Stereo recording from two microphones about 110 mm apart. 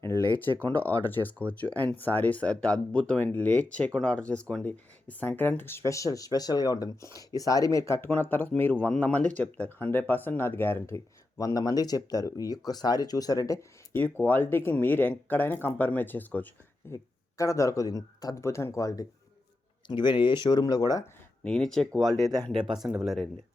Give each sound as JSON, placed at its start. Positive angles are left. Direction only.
{"t": 0.3, "sound": "speech", "side_deg": 15}
{"t": 13.9, "sound": "speech", "side_deg": 15}
{"t": 16.9, "sound": "speech", "side_deg": 30}
{"t": 19.9, "sound": "speech", "side_deg": 45}
{"t": 21.4, "sound": "speech", "side_deg": 5}